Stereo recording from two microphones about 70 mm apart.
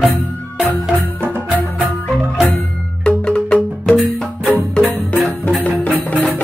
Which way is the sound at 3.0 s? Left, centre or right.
Centre.